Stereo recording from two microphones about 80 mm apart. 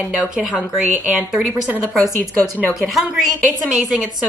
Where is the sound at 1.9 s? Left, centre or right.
Centre.